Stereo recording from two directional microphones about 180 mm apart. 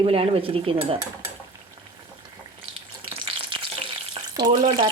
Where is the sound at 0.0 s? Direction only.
30° right (ahead or behind).